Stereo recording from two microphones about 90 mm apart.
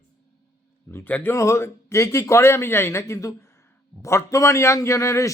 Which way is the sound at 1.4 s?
30° left (ahead or behind).